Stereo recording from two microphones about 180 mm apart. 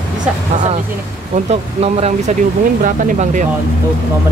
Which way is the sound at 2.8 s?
45° right (ahead or behind).